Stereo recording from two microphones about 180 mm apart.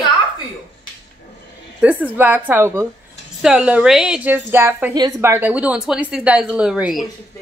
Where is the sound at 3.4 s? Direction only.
5° right (ahead or behind).